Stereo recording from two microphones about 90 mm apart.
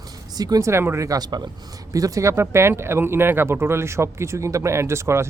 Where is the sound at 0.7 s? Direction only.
30° right (ahead or behind).